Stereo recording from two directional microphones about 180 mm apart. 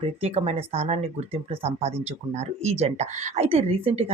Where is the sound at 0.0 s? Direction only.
35° right (ahead or behind).